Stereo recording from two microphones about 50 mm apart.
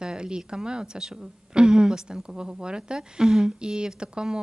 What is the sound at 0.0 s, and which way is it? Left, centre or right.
A woman's voice, centre.